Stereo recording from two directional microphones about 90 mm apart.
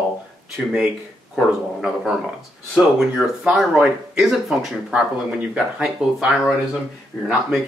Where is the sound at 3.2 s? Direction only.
Centre (ahead or behind).